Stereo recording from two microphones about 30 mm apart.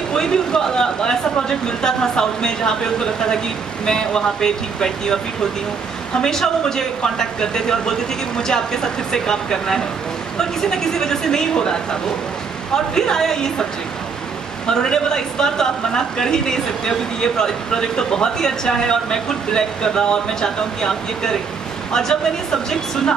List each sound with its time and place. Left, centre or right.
0.1 s speech: left
6.2 s a woman's voice: centre
14.7 s speech: left